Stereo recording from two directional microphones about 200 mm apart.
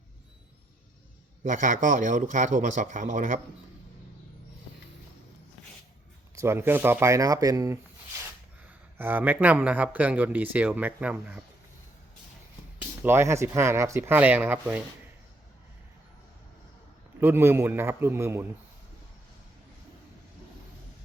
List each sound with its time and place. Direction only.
1.5 s a man's voice: 40° right (ahead or behind)
6.3 s speech: 15° right (ahead or behind)
9.0 s speech: 10° right (ahead or behind)
13.0 s speech: 10° right (ahead or behind)
17.2 s speech: 10° right (ahead or behind)